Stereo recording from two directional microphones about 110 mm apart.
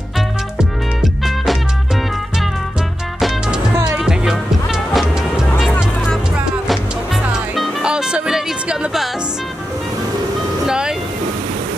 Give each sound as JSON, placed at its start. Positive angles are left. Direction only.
{"t": 0.6, "sound": "music", "side_deg": 0}
{"t": 3.2, "sound": "music", "side_deg": -5}
{"t": 3.7, "sound": "music", "side_deg": -25}
{"t": 4.0, "sound": "music", "side_deg": -5}
{"t": 7.5, "sound": "music", "side_deg": -5}
{"t": 10.7, "sound": "vehicle", "side_deg": -5}